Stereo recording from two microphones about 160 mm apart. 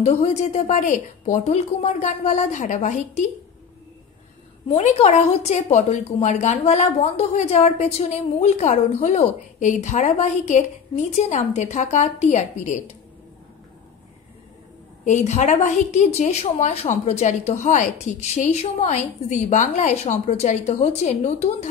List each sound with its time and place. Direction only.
0.0 s a woman's voice: 45° left (ahead or behind)
4.6 s a woman's voice: 45° left (ahead or behind)
15.0 s a woman's voice: 45° left (ahead or behind)